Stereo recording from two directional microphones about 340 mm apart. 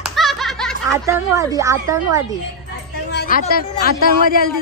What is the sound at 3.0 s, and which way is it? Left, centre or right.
A woman's voice, left.